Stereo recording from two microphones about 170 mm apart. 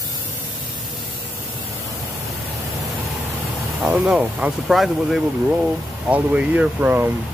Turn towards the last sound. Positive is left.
turn(degrees=-10)  # may be behind; listen again after turning